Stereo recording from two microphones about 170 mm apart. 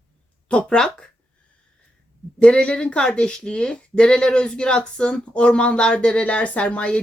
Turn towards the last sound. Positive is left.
turn(degrees=5)  # may be behind; listen again after turning